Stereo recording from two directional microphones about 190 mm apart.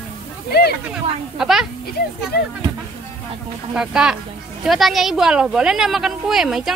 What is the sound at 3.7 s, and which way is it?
Speech, 5° right (ahead or behind).